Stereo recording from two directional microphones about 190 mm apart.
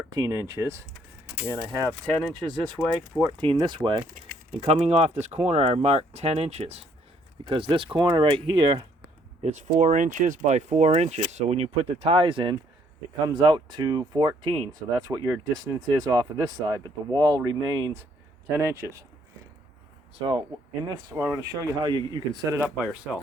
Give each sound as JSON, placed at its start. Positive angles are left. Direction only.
{"t": 0.1, "sound": "speech", "side_deg": -20}
{"t": 2.8, "sound": "speech", "side_deg": 10}
{"t": 3.2, "sound": "speech", "side_deg": -20}
{"t": 9.4, "sound": "speech", "side_deg": -40}
{"t": 20.1, "sound": "speech", "side_deg": -25}